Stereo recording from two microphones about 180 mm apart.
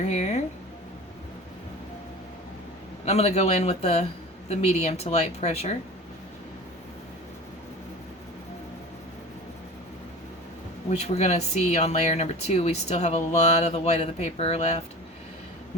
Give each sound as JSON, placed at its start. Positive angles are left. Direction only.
{"t": 0.0, "sound": "speech", "side_deg": 40}
{"t": 3.1, "sound": "speech", "side_deg": 35}
{"t": 10.8, "sound": "speech", "side_deg": 35}